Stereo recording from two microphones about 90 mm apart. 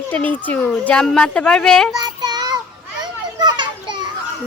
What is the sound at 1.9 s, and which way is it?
Child singing, 50° right (ahead or behind).